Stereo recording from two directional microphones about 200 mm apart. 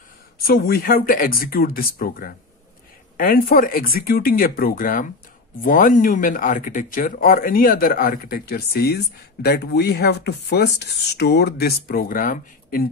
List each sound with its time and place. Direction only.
0.4 s speech: 50° left (ahead or behind)